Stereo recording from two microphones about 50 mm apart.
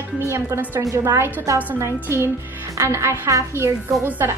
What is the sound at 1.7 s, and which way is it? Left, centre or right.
Speech, right.